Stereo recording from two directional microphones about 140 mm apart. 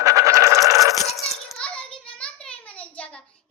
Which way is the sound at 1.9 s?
5° left (ahead or behind).